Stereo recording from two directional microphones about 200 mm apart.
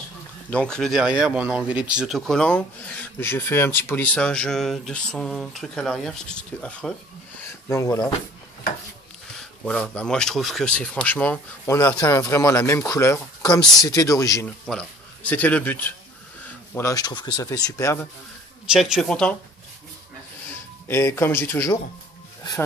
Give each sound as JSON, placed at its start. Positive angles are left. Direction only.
{"t": 0.5, "sound": "speech", "side_deg": 5}
{"t": 9.4, "sound": "speech", "side_deg": 5}
{"t": 14.7, "sound": "speech", "side_deg": 5}
{"t": 18.7, "sound": "speech", "side_deg": 0}
{"t": 20.9, "sound": "speech", "side_deg": 10}